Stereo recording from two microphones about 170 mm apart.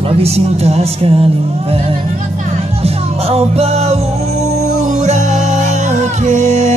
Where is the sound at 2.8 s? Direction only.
35° right (ahead or behind).